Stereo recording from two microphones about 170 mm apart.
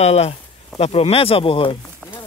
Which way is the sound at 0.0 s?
40° left (ahead or behind).